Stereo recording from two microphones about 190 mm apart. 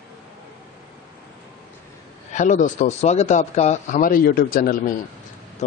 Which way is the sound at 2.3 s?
40° left (ahead or behind).